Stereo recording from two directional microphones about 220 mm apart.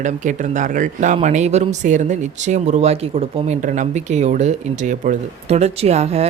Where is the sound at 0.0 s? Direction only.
35° right (ahead or behind).